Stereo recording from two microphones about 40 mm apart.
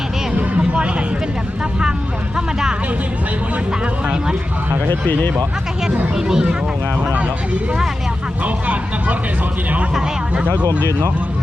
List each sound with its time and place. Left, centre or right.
0.3 s vehicle: right
2.3 s speech: centre
4.9 s speech: left
6.1 s speech: centre
8.4 s speech: right